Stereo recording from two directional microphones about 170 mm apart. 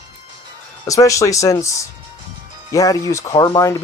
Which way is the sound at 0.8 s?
20° left (ahead or behind).